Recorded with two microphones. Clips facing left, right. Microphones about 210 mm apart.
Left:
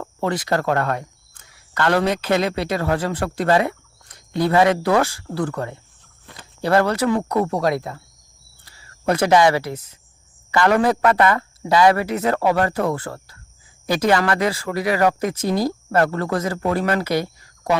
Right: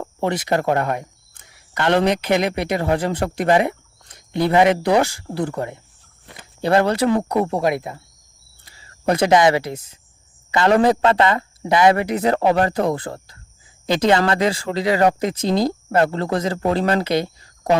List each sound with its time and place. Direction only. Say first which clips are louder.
0.0 s speech: right 1 dB; 15° right (ahead or behind)